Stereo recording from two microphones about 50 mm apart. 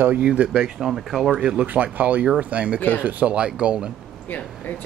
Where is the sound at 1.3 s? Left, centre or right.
Centre.